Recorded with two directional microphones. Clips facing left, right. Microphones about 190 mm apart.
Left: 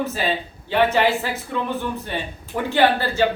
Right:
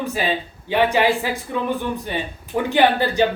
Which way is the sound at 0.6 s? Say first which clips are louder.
Right 1 dB; 15° right (ahead or behind).